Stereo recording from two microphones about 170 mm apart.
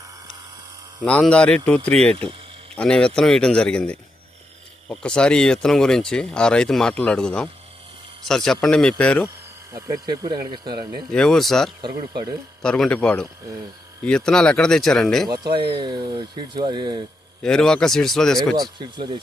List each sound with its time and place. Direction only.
1.0 s speech: 5° left (ahead or behind)
9.7 s speech: 20° right (ahead or behind)
11.1 s speech: 5° left (ahead or behind)
11.8 s speech: 25° right (ahead or behind)
12.6 s speech: 5° left (ahead or behind)
15.8 s speech: 25° right (ahead or behind)
17.4 s speech: 5° left (ahead or behind)
18.8 s speech: 25° right (ahead or behind)